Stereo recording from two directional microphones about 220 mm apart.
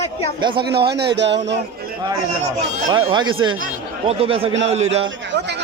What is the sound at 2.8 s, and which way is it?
Speech, 20° right (ahead or behind).